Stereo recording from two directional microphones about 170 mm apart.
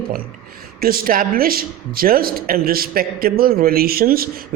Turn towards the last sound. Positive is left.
turn(degrees=-60)  # may be behind; listen again after turning